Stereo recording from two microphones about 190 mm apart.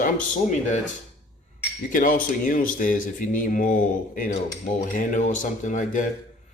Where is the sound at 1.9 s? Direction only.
45° left (ahead or behind).